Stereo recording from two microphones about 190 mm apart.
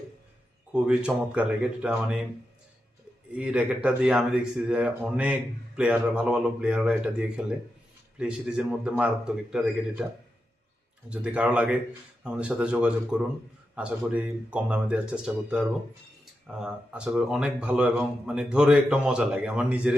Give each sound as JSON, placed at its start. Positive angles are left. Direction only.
{"t": 0.7, "sound": "speech", "side_deg": -5}
{"t": 3.3, "sound": "speech", "side_deg": -5}
{"t": 11.1, "sound": "speech", "side_deg": -5}